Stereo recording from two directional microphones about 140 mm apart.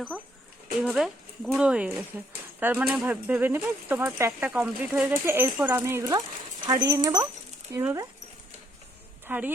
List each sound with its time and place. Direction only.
0.8 s speech: 5° right (ahead or behind)
9.2 s speech: 10° right (ahead or behind)